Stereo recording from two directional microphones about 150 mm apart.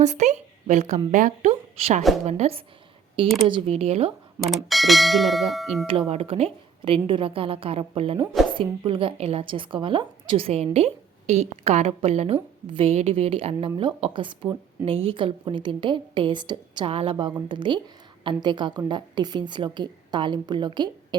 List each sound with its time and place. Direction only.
0.0 s a woman's voice: 50° right (ahead or behind)
4.4 s bell: centre (ahead or behind)
6.1 s a woman's voice: 40° right (ahead or behind)